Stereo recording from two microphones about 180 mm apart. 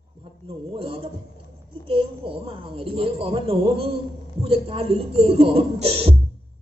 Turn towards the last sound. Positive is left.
turn(degrees=-35)  # may be behind; listen again after turning